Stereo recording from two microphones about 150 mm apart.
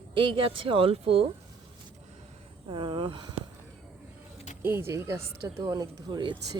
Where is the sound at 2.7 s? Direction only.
35° right (ahead or behind).